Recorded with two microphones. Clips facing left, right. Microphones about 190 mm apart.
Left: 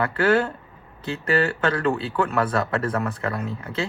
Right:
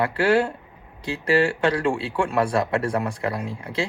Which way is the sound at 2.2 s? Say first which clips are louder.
Right 1 dB; 30° right (ahead or behind).